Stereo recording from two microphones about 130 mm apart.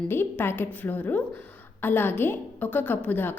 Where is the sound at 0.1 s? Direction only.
15° left (ahead or behind).